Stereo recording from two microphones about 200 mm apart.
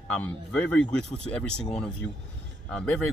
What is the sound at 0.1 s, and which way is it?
Speech, 5° left (ahead or behind).